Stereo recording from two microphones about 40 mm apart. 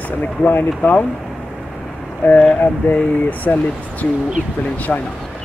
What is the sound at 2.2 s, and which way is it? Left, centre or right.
Speech, left.